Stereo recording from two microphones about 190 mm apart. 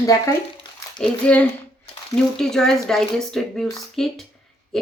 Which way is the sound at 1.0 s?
5° left (ahead or behind).